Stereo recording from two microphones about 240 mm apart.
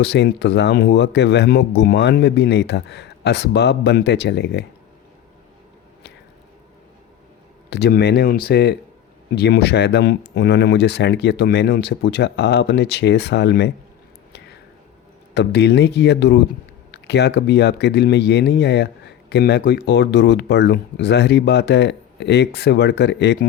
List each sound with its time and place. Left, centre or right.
0.0 s speech: left
7.7 s speech: left
15.4 s speech: left